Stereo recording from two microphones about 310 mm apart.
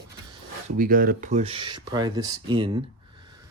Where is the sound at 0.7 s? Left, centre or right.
Right.